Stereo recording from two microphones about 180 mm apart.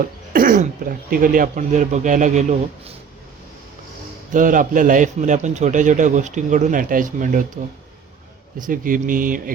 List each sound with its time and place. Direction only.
0.3 s a man's voice: 45° right (ahead or behind)
4.3 s a man's voice: 45° right (ahead or behind)
8.6 s a man's voice: 50° right (ahead or behind)